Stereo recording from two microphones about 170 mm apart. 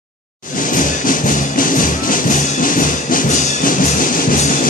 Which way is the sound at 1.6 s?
55° left (ahead or behind).